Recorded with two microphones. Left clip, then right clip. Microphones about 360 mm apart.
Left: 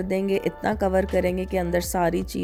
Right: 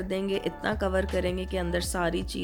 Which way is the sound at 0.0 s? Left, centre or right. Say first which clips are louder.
Left 5 dB; left.